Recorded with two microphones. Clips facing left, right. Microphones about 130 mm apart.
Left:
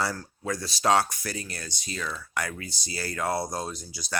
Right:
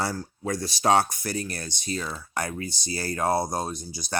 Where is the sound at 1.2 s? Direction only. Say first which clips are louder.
Right 5 dB; 50° right (ahead or behind).